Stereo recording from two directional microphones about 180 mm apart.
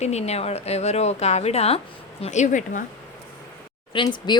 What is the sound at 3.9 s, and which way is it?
Speech, 25° left (ahead or behind).